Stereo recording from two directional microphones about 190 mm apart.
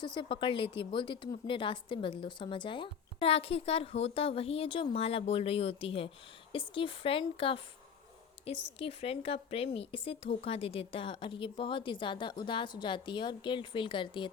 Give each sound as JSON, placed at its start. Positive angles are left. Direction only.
{"t": 0.0, "sound": "a woman's voice", "side_deg": 25}
{"t": 8.8, "sound": "speech", "side_deg": 30}